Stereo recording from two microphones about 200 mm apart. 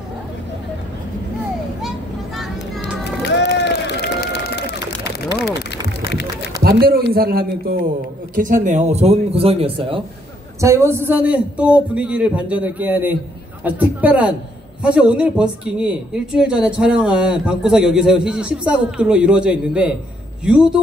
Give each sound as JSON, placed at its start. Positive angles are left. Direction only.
{"t": 2.3, "sound": "children playing", "side_deg": 0}
{"t": 3.0, "sound": "run", "side_deg": 60}
{"t": 5.2, "sound": "a sound", "side_deg": 55}
{"t": 6.6, "sound": "a man's voice", "side_deg": -50}
{"t": 10.6, "sound": "a man's voice", "side_deg": -15}